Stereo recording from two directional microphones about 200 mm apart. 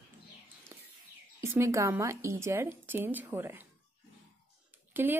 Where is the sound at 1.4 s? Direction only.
10° right (ahead or behind).